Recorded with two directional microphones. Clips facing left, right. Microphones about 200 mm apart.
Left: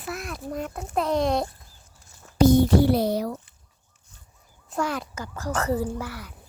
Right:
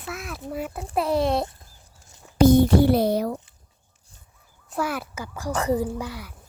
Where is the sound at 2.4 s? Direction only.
55° right (ahead or behind).